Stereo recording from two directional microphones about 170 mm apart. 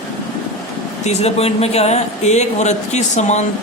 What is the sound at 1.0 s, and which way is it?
Speech, 40° left (ahead or behind).